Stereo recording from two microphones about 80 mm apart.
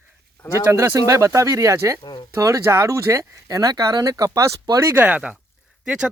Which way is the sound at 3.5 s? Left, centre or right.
Right.